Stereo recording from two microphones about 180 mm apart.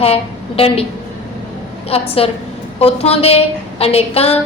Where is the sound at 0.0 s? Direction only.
30° left (ahead or behind).